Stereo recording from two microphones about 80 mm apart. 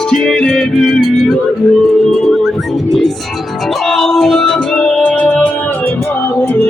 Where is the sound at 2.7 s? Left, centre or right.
Centre.